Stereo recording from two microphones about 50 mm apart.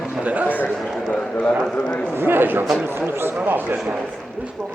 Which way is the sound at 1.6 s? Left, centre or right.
Centre.